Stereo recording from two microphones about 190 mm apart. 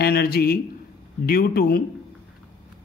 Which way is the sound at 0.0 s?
55° left (ahead or behind).